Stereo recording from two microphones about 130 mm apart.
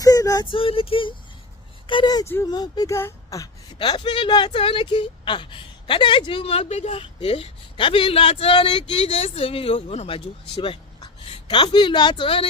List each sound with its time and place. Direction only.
0.0 s a sound: 25° left (ahead or behind)
0.5 s a woman's voice: 45° left (ahead or behind)
2.2 s speech: 20° left (ahead or behind)
2.5 s a woman's voice: 30° left (ahead or behind)
9.0 s a woman's voice: 50° left (ahead or behind)